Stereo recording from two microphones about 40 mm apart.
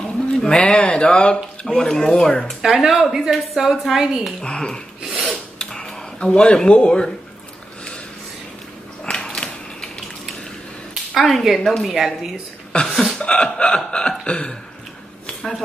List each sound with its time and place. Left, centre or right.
0.0 s a sound: centre
0.6 s speech: left
2.6 s speech: centre
4.4 s speech: centre
5.0 s filing: centre
5.6 s a sound: centre
6.2 s speech: left
9.1 s a sound: centre
11.1 s a woman's voice: centre
12.8 s hiccup: centre
13.2 s speech: left